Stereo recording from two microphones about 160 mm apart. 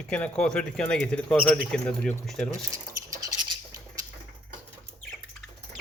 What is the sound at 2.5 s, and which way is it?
Rodents, 20° right (ahead or behind).